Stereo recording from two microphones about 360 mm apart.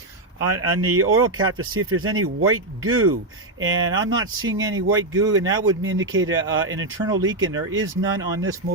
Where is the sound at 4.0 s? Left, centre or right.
Centre.